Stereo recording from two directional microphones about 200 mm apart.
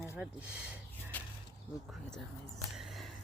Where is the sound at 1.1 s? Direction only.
10° left (ahead or behind).